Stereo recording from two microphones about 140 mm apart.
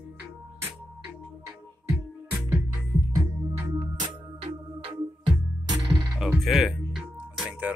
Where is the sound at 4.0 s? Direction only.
40° right (ahead or behind).